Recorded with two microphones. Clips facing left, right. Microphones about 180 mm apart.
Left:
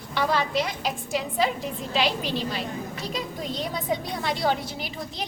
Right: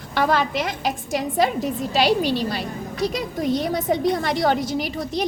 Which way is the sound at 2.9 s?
75° right (ahead or behind).